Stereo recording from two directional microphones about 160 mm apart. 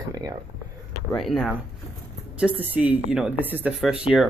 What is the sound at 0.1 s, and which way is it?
Speech, 25° right (ahead or behind).